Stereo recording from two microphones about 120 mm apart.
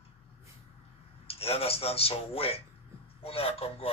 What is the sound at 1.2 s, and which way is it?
A man's voice, 55° left (ahead or behind).